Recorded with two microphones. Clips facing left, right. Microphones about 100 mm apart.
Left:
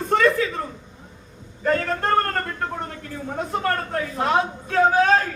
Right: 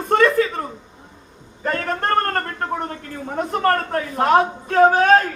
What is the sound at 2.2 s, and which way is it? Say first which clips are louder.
A man's voice: right 2 dB; 50° right (ahead or behind).